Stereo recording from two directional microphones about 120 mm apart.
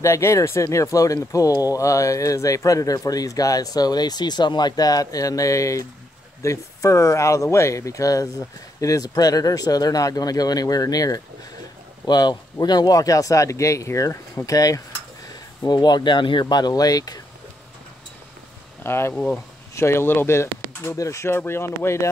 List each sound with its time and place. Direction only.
0.0 s speech: 25° left (ahead or behind)
18.8 s speech: 20° left (ahead or behind)